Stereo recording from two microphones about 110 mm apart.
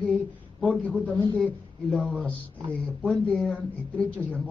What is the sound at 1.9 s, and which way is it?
Speech, centre (ahead or behind).